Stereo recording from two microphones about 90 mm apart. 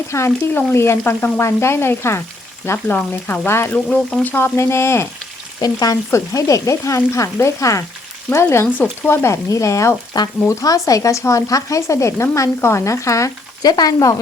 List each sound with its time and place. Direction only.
0.1 s frying: 25° left (ahead or behind)
3.8 s frying: 15° left (ahead or behind); by 5.0 s 30° left (ahead or behind)
5.5 s frying: 45° left (ahead or behind)
6.1 s speech: 35° left (ahead or behind)
8.3 s frying: 30° left (ahead or behind)
8.6 s speech: 15° left (ahead or behind)
9.1 s speech: 30° left (ahead or behind)